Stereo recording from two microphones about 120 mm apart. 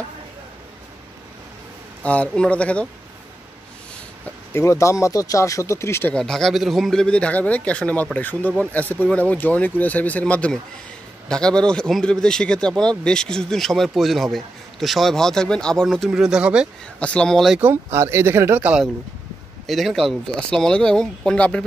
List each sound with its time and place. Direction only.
2.0 s speech: 10° left (ahead or behind)
4.6 s speech: 25° left (ahead or behind)
6.1 s speech: 5° left (ahead or behind)
16.1 s speech: 5° right (ahead or behind)
17.0 s speech: 10° left (ahead or behind)
17.6 s speech: 20° right (ahead or behind)
19.6 s speech: centre (ahead or behind)